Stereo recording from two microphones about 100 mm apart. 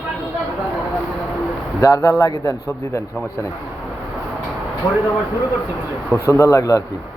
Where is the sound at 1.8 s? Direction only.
35° left (ahead or behind).